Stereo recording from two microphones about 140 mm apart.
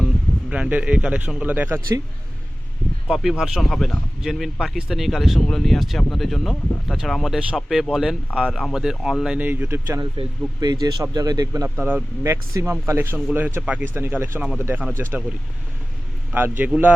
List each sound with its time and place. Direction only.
0.5 s a man's voice: 10° right (ahead or behind)
3.1 s speech: centre (ahead or behind)
10.0 s a man's voice: 30° right (ahead or behind); by 15.0 s 15° right (ahead or behind)
16.3 s a man's voice: 15° right (ahead or behind)